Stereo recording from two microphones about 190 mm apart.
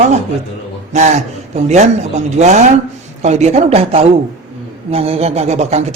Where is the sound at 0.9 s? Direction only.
35° right (ahead or behind).